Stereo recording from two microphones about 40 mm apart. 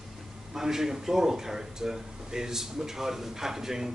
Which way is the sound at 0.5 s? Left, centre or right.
Centre.